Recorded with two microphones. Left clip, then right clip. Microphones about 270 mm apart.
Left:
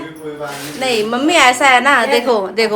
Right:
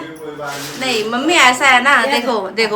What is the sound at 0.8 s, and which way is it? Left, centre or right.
A woman's voice, centre.